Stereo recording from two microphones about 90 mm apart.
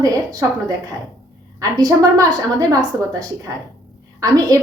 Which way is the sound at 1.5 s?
40° right (ahead or behind).